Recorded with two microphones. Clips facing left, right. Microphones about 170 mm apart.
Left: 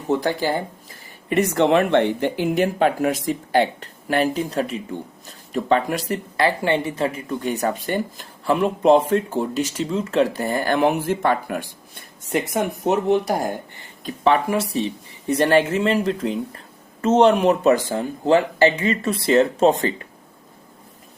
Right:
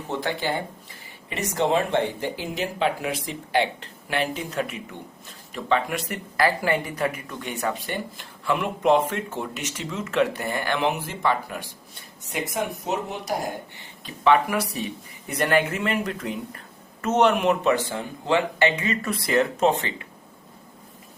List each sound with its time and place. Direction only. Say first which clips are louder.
0.2 s speech: left 5 dB; 40° left (ahead or behind)
1.3 s speech: left 6 dB; 60° left (ahead or behind)
12.8 s speech: left 10 dB; 55° left (ahead or behind)
14.0 s speech: left 1 dB; 30° left (ahead or behind)